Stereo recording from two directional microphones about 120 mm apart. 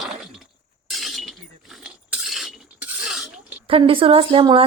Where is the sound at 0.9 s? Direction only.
Centre (ahead or behind).